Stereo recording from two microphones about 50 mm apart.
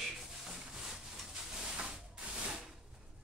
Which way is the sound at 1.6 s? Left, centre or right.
Centre.